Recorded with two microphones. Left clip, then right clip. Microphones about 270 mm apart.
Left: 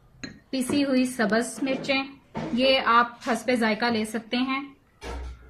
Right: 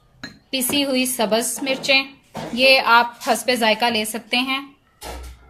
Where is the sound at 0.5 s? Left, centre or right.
Centre.